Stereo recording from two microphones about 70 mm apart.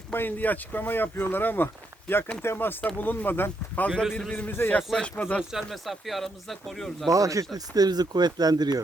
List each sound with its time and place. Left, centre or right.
0.1 s speech: left
2.8 s speech: left
4.8 s speech: centre
5.0 s speech: centre
5.4 s speech: centre
7.1 s speech: right